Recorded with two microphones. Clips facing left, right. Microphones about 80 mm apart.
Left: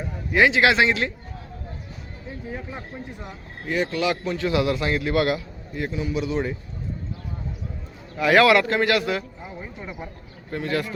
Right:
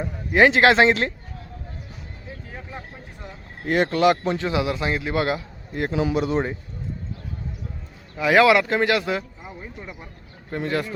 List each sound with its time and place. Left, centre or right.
0.3 s speech: right
3.7 s speech: right
5.9 s speech: right
6.1 s a man's voice: right
8.2 s speech: centre
9.5 s speech: centre
10.5 s speech: right